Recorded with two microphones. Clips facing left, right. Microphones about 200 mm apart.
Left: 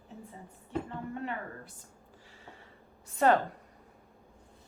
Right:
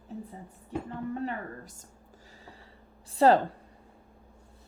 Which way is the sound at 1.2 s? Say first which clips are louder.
Right 3 dB; 40° right (ahead or behind).